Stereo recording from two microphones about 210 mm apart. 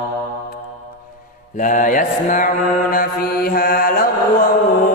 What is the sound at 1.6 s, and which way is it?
Mantra, 40° left (ahead or behind).